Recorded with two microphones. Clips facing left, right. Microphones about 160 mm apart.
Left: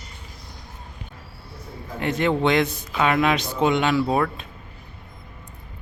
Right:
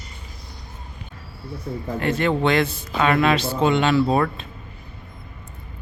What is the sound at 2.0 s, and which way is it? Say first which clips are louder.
A man's voice: even; 15° left (ahead or behind).